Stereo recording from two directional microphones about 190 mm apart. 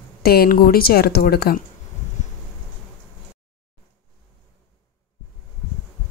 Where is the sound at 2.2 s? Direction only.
40° left (ahead or behind).